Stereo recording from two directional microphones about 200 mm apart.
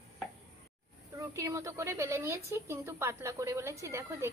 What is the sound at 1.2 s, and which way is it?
A woman's voice, 15° right (ahead or behind).